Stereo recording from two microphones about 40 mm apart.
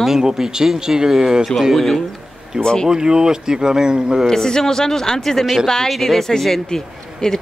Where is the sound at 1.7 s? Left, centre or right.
Centre.